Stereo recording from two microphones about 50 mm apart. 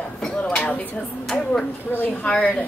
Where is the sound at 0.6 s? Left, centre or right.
Left.